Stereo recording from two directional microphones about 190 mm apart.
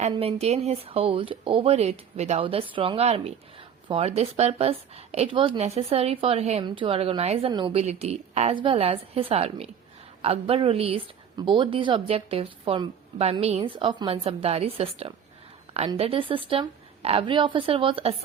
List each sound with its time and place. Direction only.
0.0 s a woman's voice: 30° right (ahead or behind)